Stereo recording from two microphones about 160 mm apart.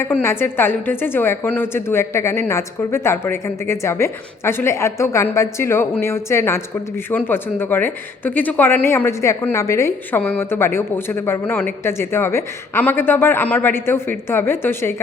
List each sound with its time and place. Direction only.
0.0 s speech: 15° left (ahead or behind)